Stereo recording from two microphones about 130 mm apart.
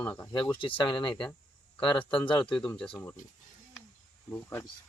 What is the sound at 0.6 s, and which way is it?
Speech, 40° left (ahead or behind).